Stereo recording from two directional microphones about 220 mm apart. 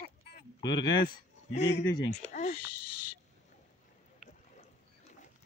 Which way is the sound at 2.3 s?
35° left (ahead or behind).